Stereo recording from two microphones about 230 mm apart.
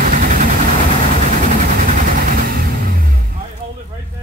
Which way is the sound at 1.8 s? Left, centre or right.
Right.